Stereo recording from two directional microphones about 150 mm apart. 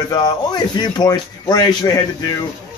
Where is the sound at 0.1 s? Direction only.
30° left (ahead or behind).